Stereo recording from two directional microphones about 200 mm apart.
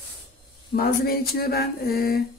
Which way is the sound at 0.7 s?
50° left (ahead or behind).